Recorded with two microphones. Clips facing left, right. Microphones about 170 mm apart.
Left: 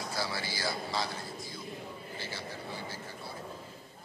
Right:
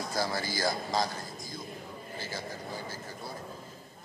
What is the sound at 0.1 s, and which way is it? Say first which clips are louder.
A man's voice: right 5 dB; 45° right (ahead or behind).